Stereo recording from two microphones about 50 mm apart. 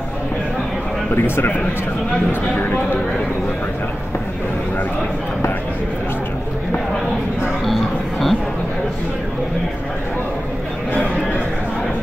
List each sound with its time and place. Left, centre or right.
1.1 s speech: left
2.5 s speech: left
7.6 s music: centre